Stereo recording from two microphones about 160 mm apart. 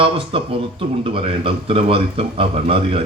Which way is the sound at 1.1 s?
35° right (ahead or behind).